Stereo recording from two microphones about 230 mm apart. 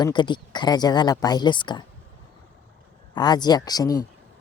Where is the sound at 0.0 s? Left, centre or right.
Centre.